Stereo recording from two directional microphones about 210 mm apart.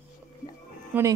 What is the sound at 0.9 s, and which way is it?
Speech, 15° right (ahead or behind).